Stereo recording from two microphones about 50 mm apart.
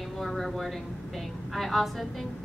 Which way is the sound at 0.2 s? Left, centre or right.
Centre.